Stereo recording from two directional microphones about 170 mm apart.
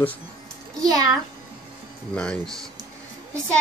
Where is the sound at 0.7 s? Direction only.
20° right (ahead or behind).